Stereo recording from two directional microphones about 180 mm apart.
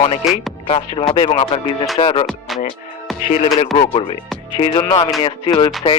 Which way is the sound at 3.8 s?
30° left (ahead or behind).